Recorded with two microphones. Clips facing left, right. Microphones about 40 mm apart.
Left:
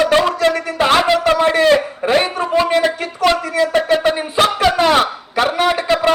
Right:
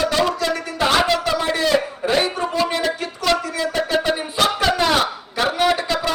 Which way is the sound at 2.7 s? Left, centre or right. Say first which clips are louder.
Left 6 dB; left.